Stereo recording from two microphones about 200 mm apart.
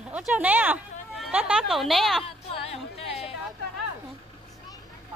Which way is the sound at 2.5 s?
30° left (ahead or behind).